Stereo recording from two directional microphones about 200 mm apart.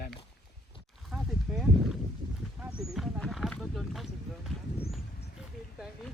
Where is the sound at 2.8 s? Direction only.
Centre (ahead or behind).